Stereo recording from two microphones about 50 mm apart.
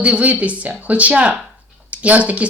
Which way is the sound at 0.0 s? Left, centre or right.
Right.